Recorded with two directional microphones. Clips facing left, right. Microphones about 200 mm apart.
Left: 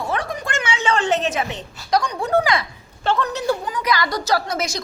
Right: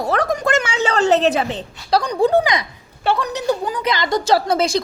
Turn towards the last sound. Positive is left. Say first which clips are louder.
# right 6 dB
turn(degrees=-30)  # may be behind; listen again after turning